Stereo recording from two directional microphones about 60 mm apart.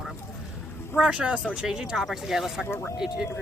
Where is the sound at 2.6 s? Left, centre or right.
Left.